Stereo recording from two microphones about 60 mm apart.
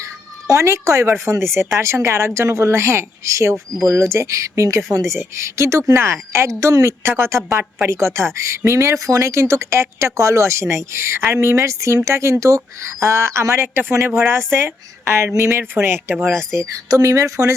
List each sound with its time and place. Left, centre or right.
0.4 s speech: right
6.6 s speech: right
16.7 s speech: right